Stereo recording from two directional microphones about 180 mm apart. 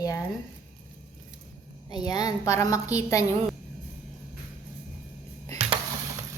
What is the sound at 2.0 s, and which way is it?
A woman's voice, 20° left (ahead or behind).